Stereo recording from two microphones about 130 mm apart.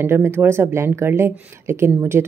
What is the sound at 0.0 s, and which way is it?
Speech, 20° right (ahead or behind).